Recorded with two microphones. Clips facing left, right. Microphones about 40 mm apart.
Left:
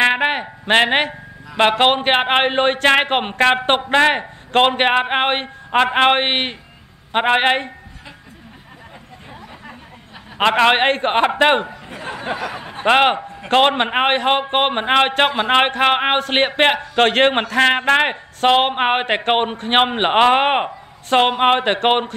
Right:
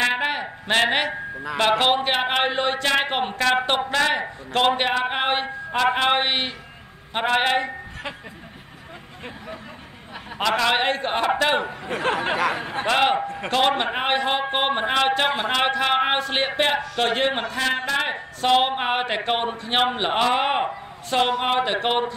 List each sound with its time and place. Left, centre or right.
0.0 s a sound: left
1.6 s a man's voice: left
5.1 s a sound: left
5.9 s a man's voice: left
10.3 s a man's voice: left
11.7 s speech: right
12.8 s a man's voice: left